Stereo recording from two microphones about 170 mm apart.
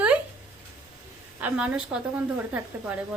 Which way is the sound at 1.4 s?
5° right (ahead or behind).